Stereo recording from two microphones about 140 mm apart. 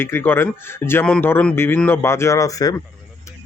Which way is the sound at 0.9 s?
15° left (ahead or behind).